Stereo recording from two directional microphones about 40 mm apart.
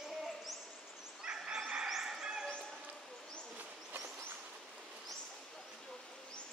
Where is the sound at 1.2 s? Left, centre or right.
Right.